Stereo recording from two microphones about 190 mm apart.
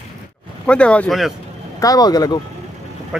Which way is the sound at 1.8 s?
20° left (ahead or behind).